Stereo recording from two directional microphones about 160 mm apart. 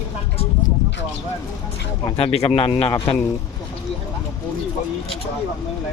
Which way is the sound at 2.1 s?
40° left (ahead or behind).